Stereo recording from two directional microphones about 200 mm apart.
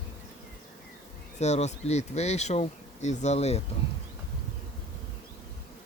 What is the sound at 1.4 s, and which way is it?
Speech, 35° left (ahead or behind).